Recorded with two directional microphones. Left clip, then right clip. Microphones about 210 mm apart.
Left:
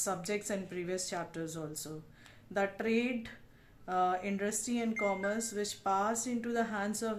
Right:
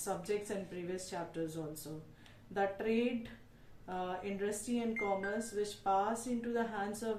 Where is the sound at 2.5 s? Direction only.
50° left (ahead or behind).